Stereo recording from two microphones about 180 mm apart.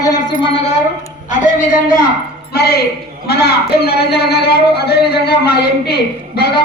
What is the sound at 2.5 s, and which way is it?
A man's voice, 60° left (ahead or behind).